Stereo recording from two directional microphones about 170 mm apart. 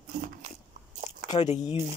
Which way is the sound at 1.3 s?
40° left (ahead or behind).